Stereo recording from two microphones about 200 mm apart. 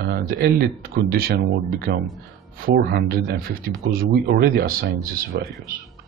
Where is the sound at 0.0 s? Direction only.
50° right (ahead or behind).